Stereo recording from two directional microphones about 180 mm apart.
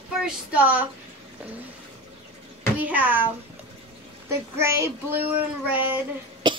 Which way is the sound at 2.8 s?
10° right (ahead or behind).